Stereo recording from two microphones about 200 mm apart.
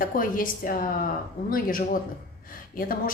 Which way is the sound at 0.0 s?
45° left (ahead or behind).